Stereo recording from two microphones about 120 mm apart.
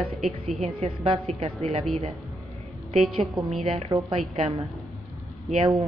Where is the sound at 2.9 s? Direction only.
Centre (ahead or behind).